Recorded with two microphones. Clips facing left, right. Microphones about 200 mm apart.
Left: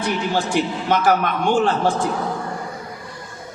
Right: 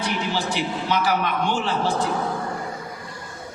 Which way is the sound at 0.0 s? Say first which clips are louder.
Left 4 dB; 50° left (ahead or behind).